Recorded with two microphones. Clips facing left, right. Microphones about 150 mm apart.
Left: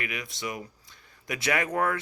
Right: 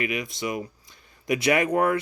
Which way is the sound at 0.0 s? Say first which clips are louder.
Right 7 dB; 20° right (ahead or behind).